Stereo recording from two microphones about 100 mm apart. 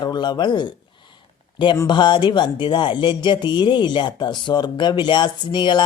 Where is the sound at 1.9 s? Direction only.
50° left (ahead or behind).